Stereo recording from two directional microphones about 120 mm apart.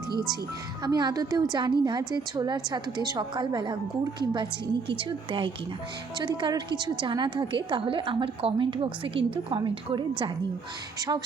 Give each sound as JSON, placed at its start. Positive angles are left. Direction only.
{"t": 0.9, "sound": "a woman's voice", "side_deg": -35}